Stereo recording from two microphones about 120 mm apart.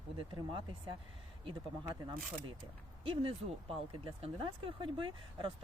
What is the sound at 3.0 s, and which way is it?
Speech, 50° right (ahead or behind).